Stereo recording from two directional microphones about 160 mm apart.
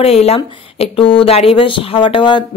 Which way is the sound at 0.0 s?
40° left (ahead or behind).